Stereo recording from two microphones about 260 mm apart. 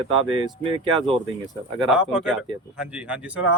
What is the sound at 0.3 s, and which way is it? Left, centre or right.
Speech, centre.